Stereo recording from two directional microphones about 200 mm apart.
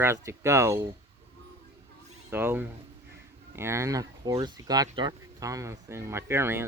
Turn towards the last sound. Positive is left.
turn(degrees=-10)  # may be behind; listen again after turning